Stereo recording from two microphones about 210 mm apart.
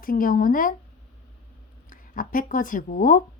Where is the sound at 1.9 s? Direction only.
40° left (ahead or behind).